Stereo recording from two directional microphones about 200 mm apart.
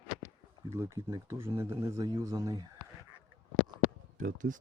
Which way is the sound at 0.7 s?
15° right (ahead or behind).